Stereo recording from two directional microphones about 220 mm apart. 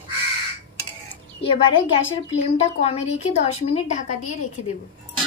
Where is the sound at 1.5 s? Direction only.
25° left (ahead or behind).